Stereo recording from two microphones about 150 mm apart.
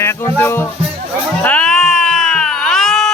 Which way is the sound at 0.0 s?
15° left (ahead or behind).